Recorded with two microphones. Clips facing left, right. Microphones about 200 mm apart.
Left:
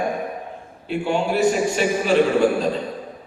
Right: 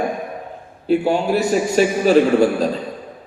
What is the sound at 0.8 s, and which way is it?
Speech, 40° right (ahead or behind).